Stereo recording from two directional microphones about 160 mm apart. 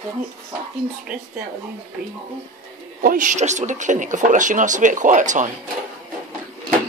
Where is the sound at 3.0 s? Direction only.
55° right (ahead or behind).